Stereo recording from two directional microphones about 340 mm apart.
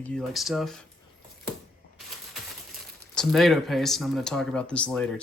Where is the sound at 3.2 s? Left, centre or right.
Centre.